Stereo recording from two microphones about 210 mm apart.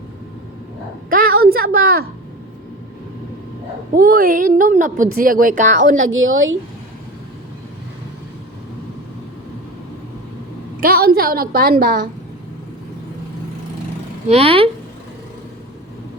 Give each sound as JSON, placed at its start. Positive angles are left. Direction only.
{"t": 1.1, "sound": "a woman's voice", "side_deg": -45}
{"t": 3.9, "sound": "speech", "side_deg": -45}
{"t": 6.2, "sound": "speech", "side_deg": -70}
{"t": 10.8, "sound": "a woman's voice", "side_deg": -45}
{"t": 14.3, "sound": "speech", "side_deg": -25}